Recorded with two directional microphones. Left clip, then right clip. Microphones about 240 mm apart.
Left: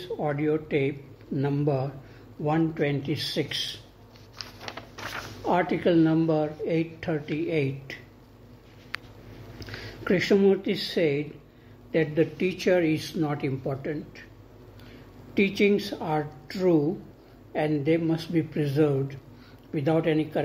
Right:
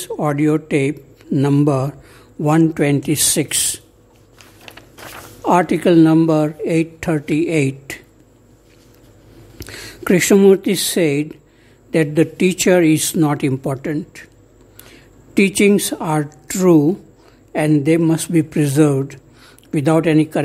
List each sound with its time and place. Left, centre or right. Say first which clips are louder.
0.0 s a woman's voice: right 10 dB; right
5.4 s a woman's voice: right 10 dB; right
10.0 s a woman's voice: right 10 dB; right